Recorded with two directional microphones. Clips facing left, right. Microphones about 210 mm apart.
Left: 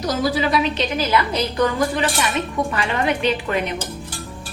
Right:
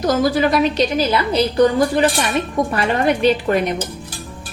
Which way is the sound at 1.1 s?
30° right (ahead or behind).